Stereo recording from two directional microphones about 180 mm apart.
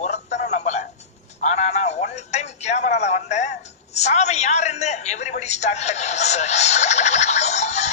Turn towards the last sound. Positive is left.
turn(degrees=40)  # may be behind; listen again after turning